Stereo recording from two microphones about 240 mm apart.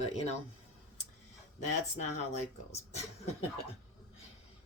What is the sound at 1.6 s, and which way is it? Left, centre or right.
Speech, left.